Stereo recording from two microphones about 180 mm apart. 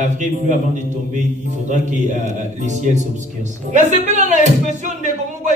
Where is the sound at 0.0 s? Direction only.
45° right (ahead or behind).